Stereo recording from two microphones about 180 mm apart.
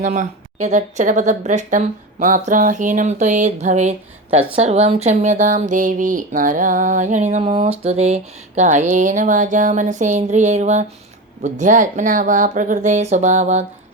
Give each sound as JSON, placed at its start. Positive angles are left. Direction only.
{"t": 0.0, "sound": "speech", "side_deg": -45}